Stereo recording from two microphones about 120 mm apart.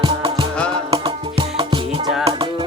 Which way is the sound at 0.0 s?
45° right (ahead or behind).